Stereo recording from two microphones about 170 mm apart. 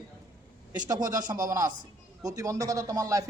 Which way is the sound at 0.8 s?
25° right (ahead or behind).